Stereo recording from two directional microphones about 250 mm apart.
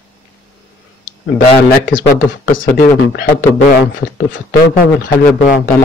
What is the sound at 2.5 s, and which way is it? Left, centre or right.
A man's voice, left.